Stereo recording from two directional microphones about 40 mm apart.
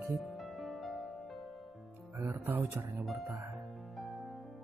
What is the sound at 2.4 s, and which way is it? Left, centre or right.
Speech, right.